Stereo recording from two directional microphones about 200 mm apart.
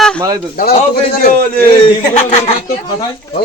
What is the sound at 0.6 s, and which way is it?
A man's voice, 45° left (ahead or behind).